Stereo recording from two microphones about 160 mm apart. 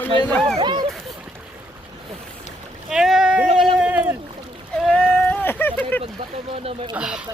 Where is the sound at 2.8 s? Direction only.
5° right (ahead or behind).